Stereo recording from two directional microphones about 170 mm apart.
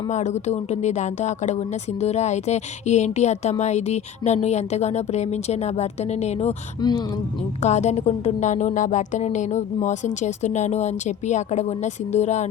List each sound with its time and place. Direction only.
0.1 s speech: 45° left (ahead or behind)
7.6 s speech: 40° left (ahead or behind)